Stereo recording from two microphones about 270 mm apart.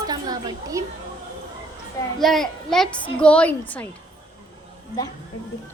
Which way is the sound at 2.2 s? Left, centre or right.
Centre.